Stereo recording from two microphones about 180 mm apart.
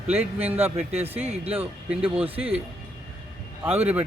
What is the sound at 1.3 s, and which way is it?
Speech, 35° right (ahead or behind).